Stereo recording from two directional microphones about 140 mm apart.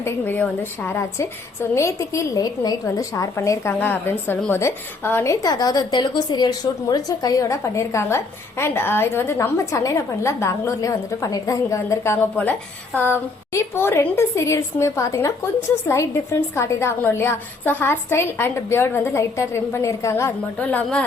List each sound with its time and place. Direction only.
0.0 s a woman's voice: 15° left (ahead or behind)